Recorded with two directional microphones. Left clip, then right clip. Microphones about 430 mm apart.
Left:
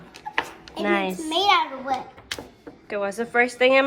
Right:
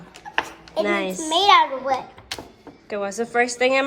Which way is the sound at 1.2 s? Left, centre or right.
Centre.